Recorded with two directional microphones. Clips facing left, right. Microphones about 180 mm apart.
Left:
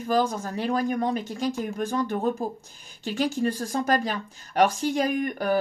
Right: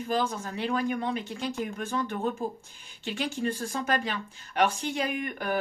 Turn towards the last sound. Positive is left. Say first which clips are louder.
# left 6 dB
turn(degrees=40)  # may be behind; listen again after turning